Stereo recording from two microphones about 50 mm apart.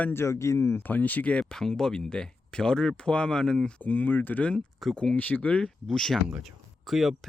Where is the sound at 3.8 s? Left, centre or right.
Left.